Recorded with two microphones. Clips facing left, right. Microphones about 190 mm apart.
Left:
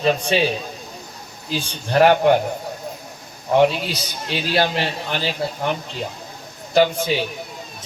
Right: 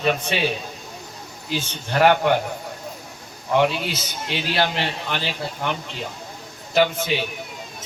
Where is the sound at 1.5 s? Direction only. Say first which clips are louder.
Left 2 dB; 35° left (ahead or behind).